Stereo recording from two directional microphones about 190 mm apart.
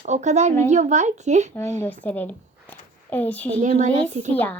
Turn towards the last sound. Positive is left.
turn(degrees=10)  # may be behind; listen again after turning